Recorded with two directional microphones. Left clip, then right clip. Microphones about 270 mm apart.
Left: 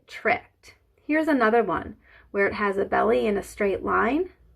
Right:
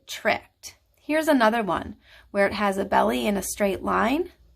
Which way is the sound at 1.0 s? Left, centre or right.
Right.